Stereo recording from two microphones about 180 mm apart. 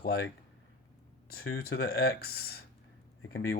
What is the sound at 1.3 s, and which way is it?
Speech, 60° left (ahead or behind).